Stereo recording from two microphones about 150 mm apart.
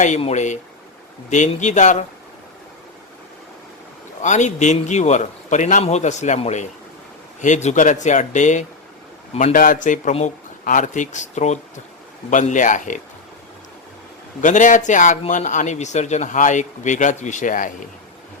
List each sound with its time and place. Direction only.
0.2 s a man's voice: 50° left (ahead or behind)
4.2 s a man's voice: 55° left (ahead or behind)
14.4 s speech: 55° left (ahead or behind)